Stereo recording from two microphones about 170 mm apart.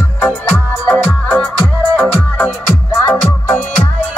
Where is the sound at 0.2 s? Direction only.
10° left (ahead or behind).